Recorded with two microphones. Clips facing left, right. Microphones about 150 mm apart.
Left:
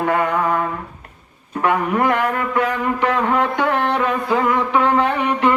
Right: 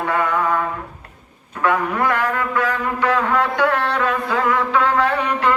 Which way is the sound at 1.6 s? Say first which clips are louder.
Left 1 dB; 20° left (ahead or behind).